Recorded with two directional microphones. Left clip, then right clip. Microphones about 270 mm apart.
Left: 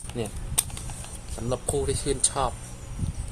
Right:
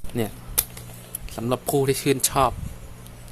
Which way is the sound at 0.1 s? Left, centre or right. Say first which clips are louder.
Right 5 dB; right.